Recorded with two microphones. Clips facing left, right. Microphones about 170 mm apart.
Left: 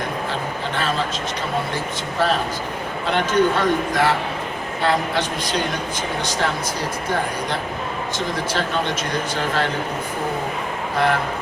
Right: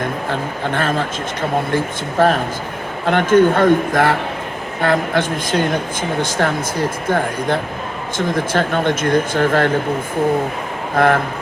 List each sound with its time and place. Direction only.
0.3 s speech: 50° right (ahead or behind)
10.9 s speech: 50° right (ahead or behind)